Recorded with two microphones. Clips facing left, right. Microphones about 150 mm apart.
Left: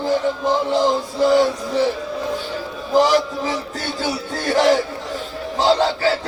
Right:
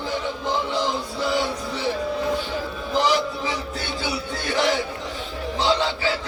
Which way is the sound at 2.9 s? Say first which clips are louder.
Left 6 dB; 45° left (ahead or behind).